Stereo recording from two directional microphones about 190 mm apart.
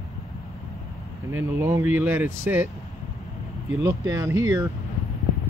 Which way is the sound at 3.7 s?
15° right (ahead or behind).